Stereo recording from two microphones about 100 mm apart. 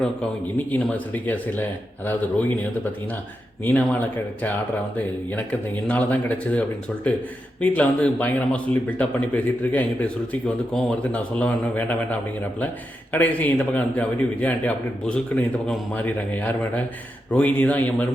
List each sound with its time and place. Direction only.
0.0 s a man's voice: 15° left (ahead or behind)
4.9 s a man's voice: 15° left (ahead or behind)
13.1 s a man's voice: 15° left (ahead or behind)